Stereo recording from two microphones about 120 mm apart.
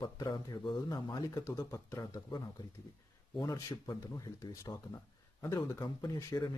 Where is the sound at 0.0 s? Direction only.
35° left (ahead or behind).